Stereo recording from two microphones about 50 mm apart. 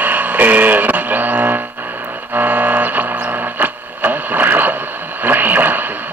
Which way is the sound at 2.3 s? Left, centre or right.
Right.